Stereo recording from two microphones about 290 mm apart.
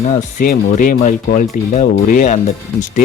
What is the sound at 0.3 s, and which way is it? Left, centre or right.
Speech, left.